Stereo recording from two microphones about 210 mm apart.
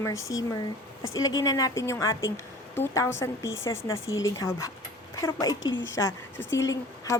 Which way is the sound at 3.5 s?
65° left (ahead or behind).